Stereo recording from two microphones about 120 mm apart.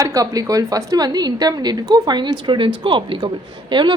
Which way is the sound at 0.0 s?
30° right (ahead or behind).